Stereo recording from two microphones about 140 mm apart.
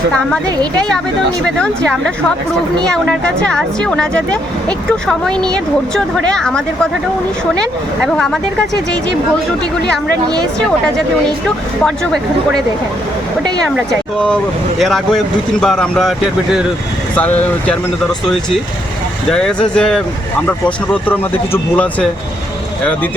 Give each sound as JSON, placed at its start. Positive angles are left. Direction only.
{"t": 0.4, "sound": "speech", "side_deg": -30}
{"t": 1.5, "sound": "speech", "side_deg": 5}
{"t": 8.0, "sound": "speech", "side_deg": 5}
{"t": 14.8, "sound": "speech", "side_deg": 0}
{"t": 17.2, "sound": "speech", "side_deg": 10}
{"t": 19.3, "sound": "speech", "side_deg": 5}